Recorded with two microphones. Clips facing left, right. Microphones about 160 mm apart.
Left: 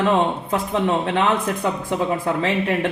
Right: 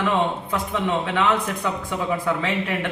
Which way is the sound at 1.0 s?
40° left (ahead or behind).